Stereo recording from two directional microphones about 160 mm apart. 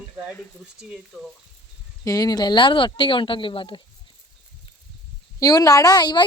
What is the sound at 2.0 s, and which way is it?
Speech, 25° left (ahead or behind).